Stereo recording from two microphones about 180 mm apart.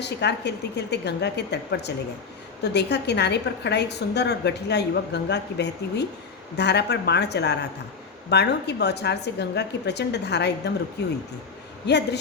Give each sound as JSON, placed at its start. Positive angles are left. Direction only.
{"t": 0.0, "sound": "a woman's voice", "side_deg": 70}